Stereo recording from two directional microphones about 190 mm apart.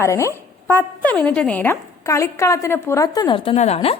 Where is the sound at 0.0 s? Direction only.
15° left (ahead or behind).